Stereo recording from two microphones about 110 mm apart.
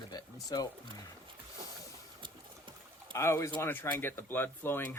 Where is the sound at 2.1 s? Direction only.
50° right (ahead or behind).